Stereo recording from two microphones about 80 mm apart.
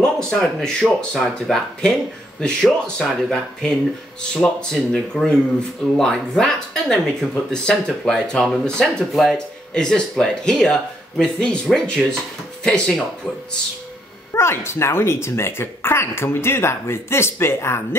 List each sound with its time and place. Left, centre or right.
0.0 s speech: centre
14.3 s speech: left